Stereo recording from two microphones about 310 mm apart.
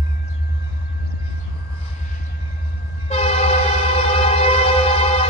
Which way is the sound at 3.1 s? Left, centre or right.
Centre.